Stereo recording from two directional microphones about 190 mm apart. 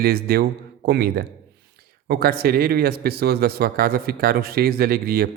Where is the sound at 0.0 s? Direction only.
55° right (ahead or behind).